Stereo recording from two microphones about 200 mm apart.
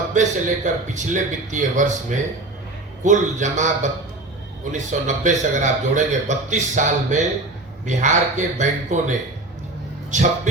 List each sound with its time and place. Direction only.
0.1 s a man's voice: 40° right (ahead or behind)
4.7 s a man's voice: 40° right (ahead or behind)